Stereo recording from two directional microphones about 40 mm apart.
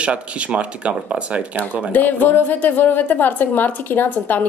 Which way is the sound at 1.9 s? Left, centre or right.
Left.